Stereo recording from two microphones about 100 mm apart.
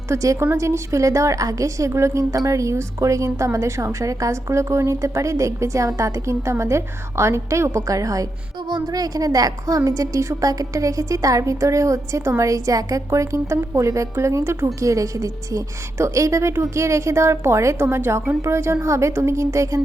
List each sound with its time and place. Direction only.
0.1 s a woman's voice: 30° right (ahead or behind)